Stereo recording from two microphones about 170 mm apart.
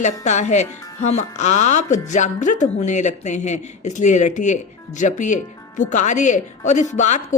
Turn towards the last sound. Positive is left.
turn(degrees=45)  # may be behind; listen again after turning